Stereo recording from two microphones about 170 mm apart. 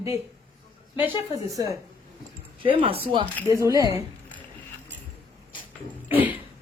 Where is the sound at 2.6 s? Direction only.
30° right (ahead or behind).